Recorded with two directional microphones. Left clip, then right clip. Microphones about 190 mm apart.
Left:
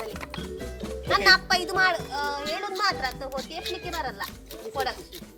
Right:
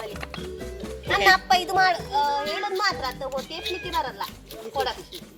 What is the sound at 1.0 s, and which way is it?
Speech, 60° left (ahead or behind).